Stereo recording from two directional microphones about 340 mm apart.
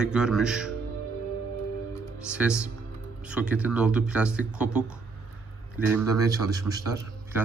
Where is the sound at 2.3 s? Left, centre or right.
Centre.